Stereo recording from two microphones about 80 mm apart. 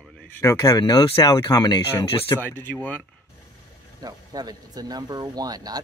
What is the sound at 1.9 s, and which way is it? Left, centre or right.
Speech, left.